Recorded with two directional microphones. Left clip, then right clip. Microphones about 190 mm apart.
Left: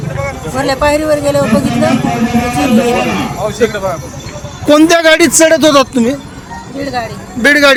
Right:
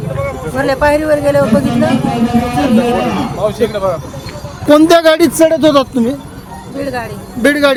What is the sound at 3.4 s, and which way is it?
Speech, 45° right (ahead or behind).